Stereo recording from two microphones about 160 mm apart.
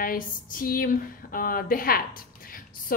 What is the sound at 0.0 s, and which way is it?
Speech, 60° left (ahead or behind).